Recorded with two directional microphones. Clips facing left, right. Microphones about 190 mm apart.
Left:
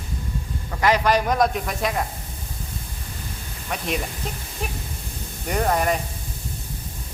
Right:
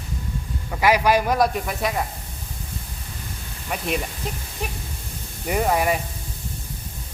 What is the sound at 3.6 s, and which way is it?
Speech, 5° right (ahead or behind).